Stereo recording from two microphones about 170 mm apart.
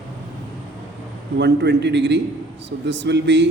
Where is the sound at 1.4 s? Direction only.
90° right.